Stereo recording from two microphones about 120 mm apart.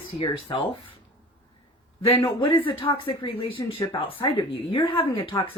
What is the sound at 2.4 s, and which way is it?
Speech, 45° left (ahead or behind).